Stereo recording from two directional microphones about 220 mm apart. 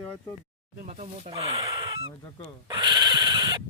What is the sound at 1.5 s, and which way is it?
Speech, 15° right (ahead or behind).